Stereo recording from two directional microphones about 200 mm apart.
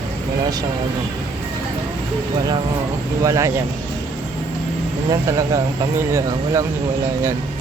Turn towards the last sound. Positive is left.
turn(degrees=-15)  # may be behind; listen again after turning